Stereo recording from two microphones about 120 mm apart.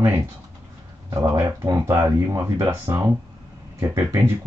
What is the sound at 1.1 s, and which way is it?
Speech, 25° right (ahead or behind).